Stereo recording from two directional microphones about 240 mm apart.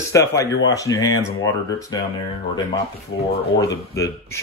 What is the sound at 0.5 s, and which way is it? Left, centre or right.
Speech, left.